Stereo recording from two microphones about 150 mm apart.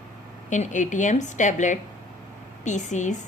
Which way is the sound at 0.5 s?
55° left (ahead or behind).